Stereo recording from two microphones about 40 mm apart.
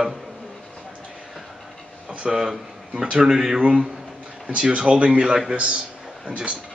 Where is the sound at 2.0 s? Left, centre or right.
Right.